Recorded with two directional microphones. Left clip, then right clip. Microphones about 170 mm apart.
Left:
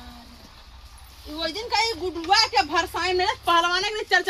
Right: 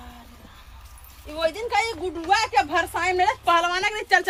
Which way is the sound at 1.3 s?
65° right (ahead or behind).